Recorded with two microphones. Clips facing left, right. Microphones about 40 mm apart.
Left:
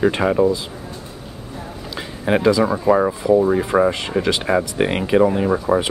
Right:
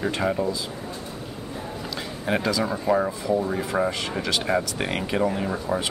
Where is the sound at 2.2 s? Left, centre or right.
Centre.